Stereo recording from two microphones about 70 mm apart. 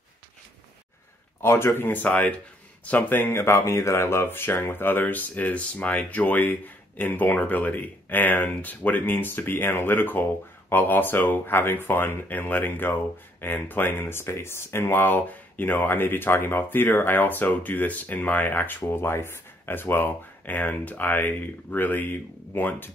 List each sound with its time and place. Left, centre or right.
1.4 s speech: left